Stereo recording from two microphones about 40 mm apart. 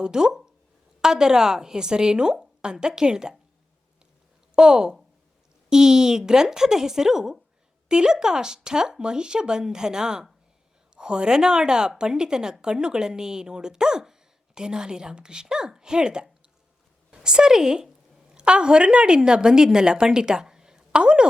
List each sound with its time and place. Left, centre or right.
0.0 s a woman's voice: centre
4.5 s a woman's voice: centre
20.9 s a sound: right